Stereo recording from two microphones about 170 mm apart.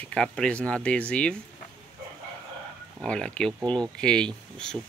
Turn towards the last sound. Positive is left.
turn(degrees=5)  # may be behind; listen again after turning